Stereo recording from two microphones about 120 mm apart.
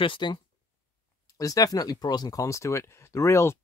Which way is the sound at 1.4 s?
30° left (ahead or behind).